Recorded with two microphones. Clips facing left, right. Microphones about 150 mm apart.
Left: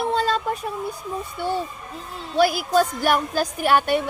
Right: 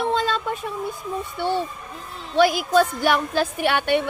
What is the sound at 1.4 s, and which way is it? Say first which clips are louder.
A woman's voice: right 2 dB; 45° left (ahead or behind).